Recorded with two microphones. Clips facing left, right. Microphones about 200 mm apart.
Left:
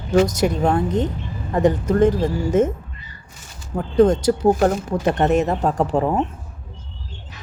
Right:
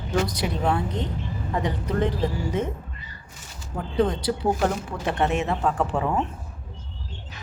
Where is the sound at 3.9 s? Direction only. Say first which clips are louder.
Left 8 dB; 45° left (ahead or behind).